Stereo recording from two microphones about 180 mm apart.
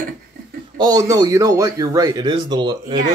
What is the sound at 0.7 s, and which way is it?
A man's voice, 20° right (ahead or behind).